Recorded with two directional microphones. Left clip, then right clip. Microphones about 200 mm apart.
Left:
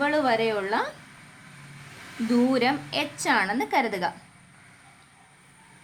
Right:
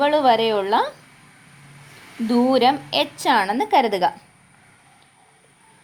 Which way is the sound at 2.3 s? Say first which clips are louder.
Right 6 dB; 25° right (ahead or behind).